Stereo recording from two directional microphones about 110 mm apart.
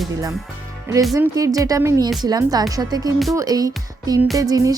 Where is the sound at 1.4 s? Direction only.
35° right (ahead or behind).